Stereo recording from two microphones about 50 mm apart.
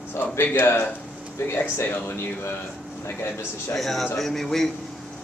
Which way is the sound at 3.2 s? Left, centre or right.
Left.